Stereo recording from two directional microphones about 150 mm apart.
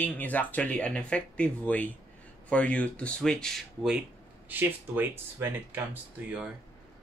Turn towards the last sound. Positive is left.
turn(degrees=-10)  # may be behind; listen again after turning